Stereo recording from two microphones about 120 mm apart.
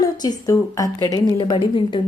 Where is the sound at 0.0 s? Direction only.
35° left (ahead or behind).